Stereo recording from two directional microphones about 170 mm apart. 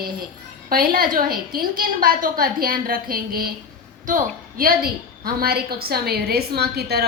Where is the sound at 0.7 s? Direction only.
60° right (ahead or behind).